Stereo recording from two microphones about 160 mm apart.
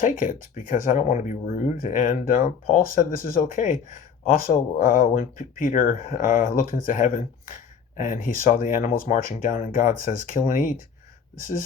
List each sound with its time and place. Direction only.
0.0 s speech: 55° left (ahead or behind)